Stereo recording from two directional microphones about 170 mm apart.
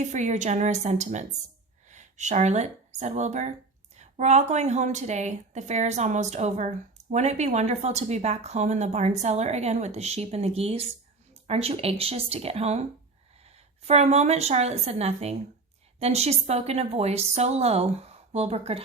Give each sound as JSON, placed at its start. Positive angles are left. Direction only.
{"t": 0.0, "sound": "a woman's voice", "side_deg": -45}